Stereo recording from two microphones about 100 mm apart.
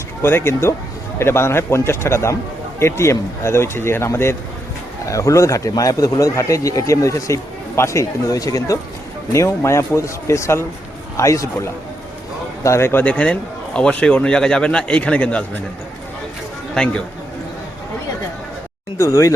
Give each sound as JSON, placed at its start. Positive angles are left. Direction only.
{"t": 0.2, "sound": "speech", "side_deg": 25}
{"t": 12.6, "sound": "a man's voice", "side_deg": 25}
{"t": 16.7, "sound": "a man's voice", "side_deg": 10}
{"t": 18.9, "sound": "speech", "side_deg": 30}